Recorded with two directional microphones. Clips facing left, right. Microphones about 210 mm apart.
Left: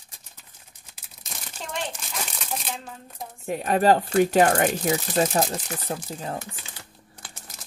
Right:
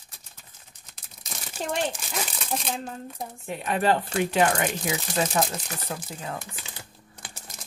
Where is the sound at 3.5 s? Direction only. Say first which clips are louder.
Left 5 dB; 40° left (ahead or behind).